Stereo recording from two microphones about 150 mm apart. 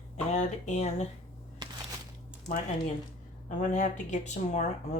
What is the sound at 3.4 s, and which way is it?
Speech, 55° left (ahead or behind).